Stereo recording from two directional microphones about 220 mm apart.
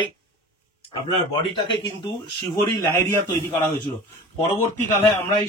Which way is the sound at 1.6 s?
20° left (ahead or behind).